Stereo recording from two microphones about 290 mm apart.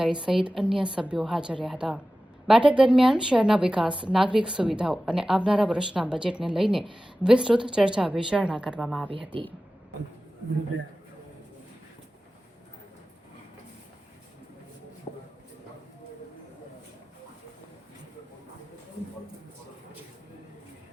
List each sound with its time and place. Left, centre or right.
0.0 s a woman's voice: centre